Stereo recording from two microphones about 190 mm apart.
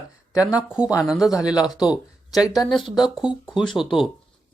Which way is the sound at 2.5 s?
20° left (ahead or behind).